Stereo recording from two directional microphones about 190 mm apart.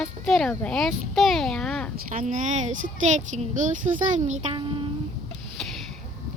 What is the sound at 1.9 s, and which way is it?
A woman's voice, 45° right (ahead or behind).